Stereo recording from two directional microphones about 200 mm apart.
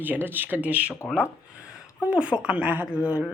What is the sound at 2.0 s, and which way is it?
Speech, 5° right (ahead or behind).